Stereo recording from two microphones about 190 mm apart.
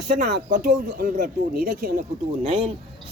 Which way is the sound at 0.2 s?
60° right (ahead or behind).